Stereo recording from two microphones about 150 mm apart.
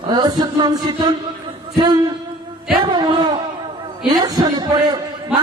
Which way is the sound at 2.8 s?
35° right (ahead or behind).